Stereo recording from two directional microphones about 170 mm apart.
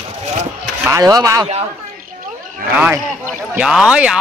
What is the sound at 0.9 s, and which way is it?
Speech, 20° right (ahead or behind).